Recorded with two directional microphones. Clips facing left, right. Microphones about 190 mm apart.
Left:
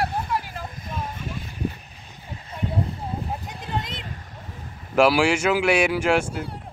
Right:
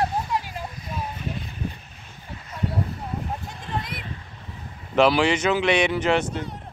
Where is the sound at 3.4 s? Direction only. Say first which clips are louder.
Left 1 dB; 20° left (ahead or behind).